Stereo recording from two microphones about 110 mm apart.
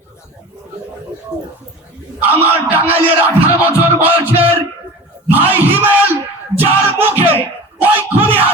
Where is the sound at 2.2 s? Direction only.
20° right (ahead or behind).